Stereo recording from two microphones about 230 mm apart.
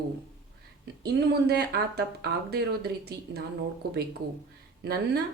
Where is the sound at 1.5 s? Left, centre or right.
Right.